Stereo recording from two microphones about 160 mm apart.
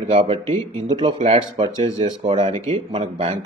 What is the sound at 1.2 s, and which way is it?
Speech, 45° right (ahead or behind).